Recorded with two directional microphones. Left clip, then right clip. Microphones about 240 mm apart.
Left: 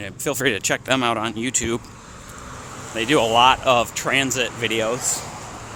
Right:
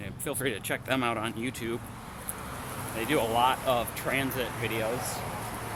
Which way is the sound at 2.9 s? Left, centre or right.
Left.